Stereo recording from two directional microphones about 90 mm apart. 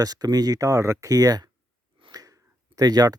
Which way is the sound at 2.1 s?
45° right (ahead or behind).